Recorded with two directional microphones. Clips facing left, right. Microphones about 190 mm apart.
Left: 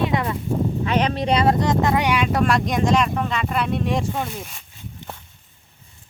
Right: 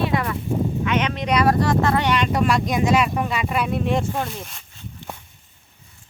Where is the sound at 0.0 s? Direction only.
20° left (ahead or behind).